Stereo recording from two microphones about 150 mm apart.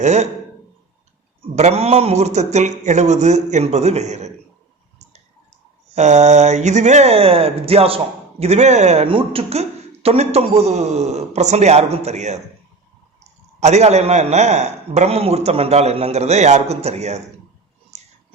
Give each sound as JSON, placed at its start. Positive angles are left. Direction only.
{"t": 0.0, "sound": "speech", "side_deg": -50}
{"t": 1.4, "sound": "speech", "side_deg": -45}
{"t": 5.9, "sound": "speech", "side_deg": -50}
{"t": 13.6, "sound": "speech", "side_deg": -50}
{"t": 17.9, "sound": "a sound", "side_deg": -50}